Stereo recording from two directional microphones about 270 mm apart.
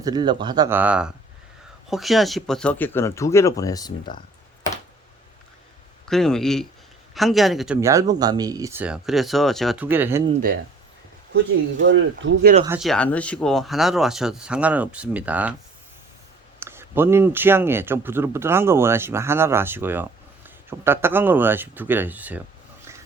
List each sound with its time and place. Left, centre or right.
0.0 s speech: centre
6.1 s speech: centre
11.8 s speech: right
12.6 s speech: centre
16.6 s speech: centre